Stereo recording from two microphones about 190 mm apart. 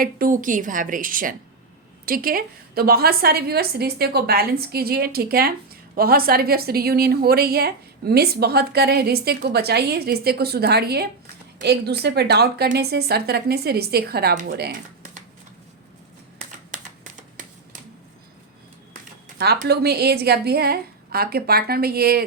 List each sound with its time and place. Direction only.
0.0 s a woman's voice: 45° right (ahead or behind)
16.4 s a sound: 40° right (ahead or behind)
19.4 s a woman's voice: 55° right (ahead or behind)